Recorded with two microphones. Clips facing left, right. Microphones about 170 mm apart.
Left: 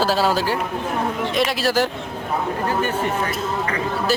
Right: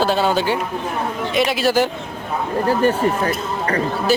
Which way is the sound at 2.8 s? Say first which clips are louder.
Right 5 dB; 35° right (ahead or behind).